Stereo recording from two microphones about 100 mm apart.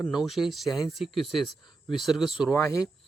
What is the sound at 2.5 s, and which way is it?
Speech, 30° left (ahead or behind).